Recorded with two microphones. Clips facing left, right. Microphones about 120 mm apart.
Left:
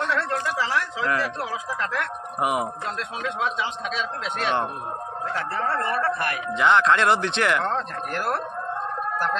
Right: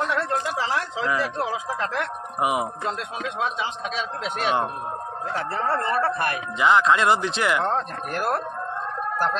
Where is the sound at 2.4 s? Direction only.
Centre (ahead or behind).